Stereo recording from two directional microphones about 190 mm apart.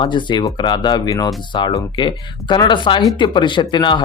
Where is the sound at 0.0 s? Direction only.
25° left (ahead or behind).